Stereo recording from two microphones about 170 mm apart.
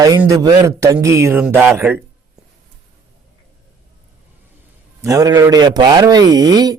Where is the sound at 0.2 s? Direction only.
20° right (ahead or behind).